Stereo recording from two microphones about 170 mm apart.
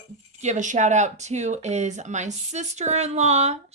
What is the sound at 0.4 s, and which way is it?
Speech, 45° right (ahead or behind).